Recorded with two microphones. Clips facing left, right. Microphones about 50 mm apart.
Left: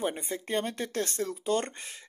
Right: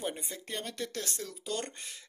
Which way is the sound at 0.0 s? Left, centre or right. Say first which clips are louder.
Left 6 dB; left.